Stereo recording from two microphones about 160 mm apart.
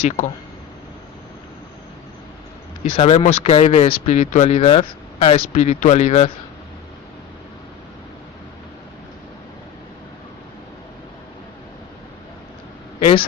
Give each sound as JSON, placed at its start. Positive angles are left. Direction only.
{"t": 2.9, "sound": "speech", "side_deg": 35}
{"t": 13.0, "sound": "a woman's voice", "side_deg": 35}